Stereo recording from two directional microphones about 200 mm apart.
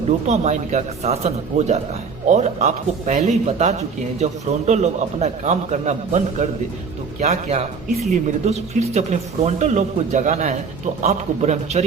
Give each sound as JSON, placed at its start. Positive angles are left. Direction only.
{"t": 0.3, "sound": "a man's voice", "side_deg": -35}